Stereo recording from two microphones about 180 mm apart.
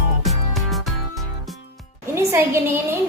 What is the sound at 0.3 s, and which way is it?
Music, centre (ahead or behind).